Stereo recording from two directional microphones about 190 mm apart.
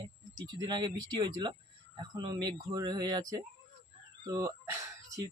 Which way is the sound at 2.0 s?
25° right (ahead or behind).